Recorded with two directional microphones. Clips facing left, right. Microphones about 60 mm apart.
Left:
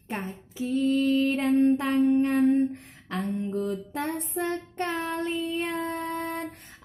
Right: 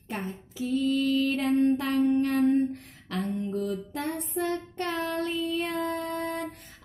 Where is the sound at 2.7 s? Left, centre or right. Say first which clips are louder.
Even; left.